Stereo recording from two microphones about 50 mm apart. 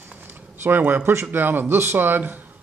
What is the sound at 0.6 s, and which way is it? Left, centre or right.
Speech, right.